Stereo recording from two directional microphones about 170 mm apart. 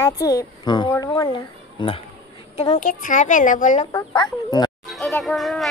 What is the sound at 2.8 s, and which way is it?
A woman's voice, 50° left (ahead or behind).